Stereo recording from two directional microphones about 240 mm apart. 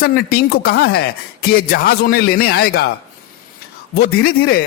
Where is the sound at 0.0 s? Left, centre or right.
Left.